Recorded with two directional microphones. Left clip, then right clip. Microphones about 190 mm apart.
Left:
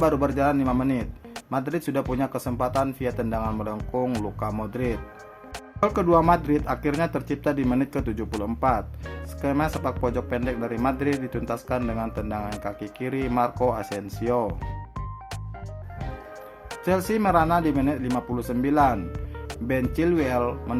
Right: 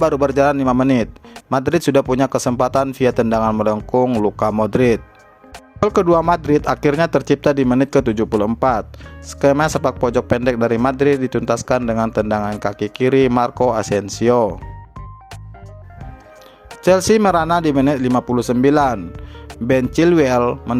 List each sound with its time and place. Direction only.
0.0 s speech: 50° right (ahead or behind)
16.8 s speech: 45° right (ahead or behind)